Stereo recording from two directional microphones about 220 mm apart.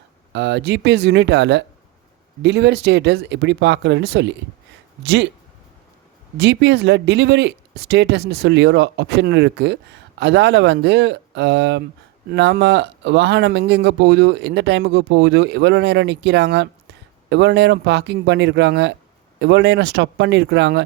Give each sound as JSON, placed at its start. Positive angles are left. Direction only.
{"t": 0.3, "sound": "speech", "side_deg": -50}
{"t": 6.3, "sound": "speech", "side_deg": -50}